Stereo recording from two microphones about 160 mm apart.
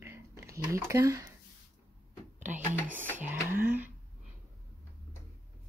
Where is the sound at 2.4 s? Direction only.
50° right (ahead or behind).